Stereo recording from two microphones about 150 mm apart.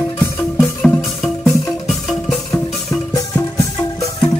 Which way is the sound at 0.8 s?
5° left (ahead or behind).